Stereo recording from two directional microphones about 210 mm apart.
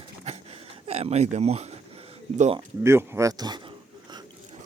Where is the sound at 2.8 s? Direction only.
10° right (ahead or behind).